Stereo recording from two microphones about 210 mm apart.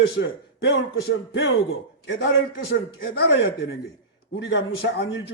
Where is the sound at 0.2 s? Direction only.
55° left (ahead or behind).